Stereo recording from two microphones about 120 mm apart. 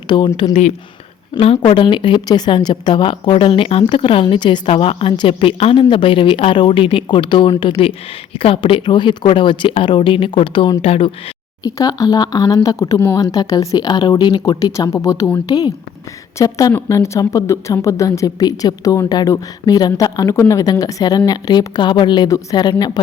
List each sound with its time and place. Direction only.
0.1 s a woman's voice: 40° left (ahead or behind)
1.4 s a woman's voice: 45° left (ahead or behind)
11.6 s a woman's voice: 30° left (ahead or behind)
14.7 s a woman's voice: 25° left (ahead or behind)